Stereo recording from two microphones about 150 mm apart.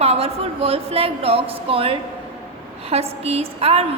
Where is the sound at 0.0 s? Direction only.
45° right (ahead or behind).